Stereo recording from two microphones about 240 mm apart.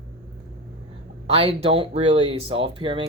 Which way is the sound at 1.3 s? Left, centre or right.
Right.